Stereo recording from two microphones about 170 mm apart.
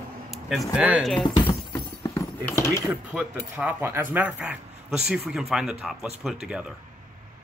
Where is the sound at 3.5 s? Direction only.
15° right (ahead or behind).